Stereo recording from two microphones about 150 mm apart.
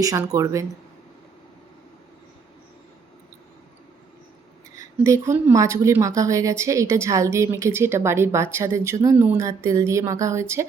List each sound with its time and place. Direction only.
0.0 s a woman's voice: 25° right (ahead or behind)
4.9 s a woman's voice: 20° right (ahead or behind)